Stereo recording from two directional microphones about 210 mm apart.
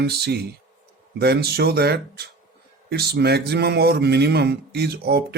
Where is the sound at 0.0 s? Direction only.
50° right (ahead or behind).